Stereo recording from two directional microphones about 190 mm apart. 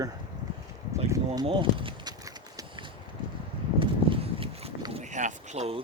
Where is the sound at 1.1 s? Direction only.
20° right (ahead or behind).